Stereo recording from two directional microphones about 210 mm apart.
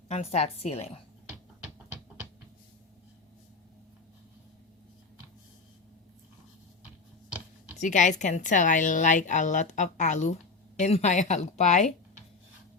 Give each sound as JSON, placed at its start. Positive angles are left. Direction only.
{"t": 0.1, "sound": "a woman's voice", "side_deg": 30}
{"t": 7.8, "sound": "a woman's voice", "side_deg": 35}